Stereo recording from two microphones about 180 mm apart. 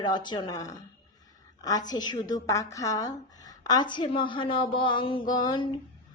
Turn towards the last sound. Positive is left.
turn(degrees=25)  # may be behind; listen again after turning